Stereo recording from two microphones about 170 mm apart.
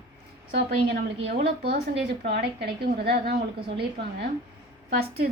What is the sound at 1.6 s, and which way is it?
A woman's voice, 70° right (ahead or behind).